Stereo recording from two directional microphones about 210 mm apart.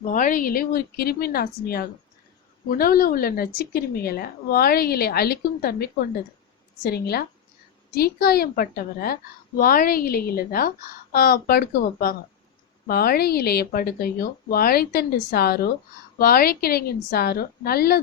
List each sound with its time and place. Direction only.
0.0 s a woman's voice: 40° left (ahead or behind)